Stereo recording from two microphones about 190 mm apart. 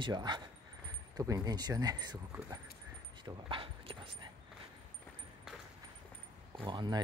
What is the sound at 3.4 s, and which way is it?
Dog, 30° right (ahead or behind).